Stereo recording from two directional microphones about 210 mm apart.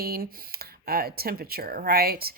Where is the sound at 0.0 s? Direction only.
45° right (ahead or behind).